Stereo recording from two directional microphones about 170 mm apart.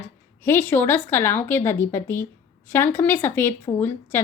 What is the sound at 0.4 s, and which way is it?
A woman's voice, 10° left (ahead or behind).